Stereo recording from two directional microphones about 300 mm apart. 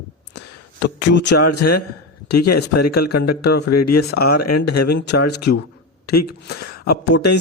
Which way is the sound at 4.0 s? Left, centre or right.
Left.